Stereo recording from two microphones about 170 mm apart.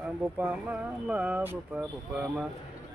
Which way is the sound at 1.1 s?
10° right (ahead or behind).